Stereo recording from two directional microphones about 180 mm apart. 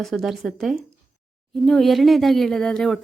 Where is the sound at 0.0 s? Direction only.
Centre (ahead or behind).